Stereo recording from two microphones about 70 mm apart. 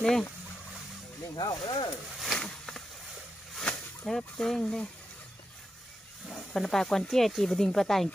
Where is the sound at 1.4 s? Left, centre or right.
Left.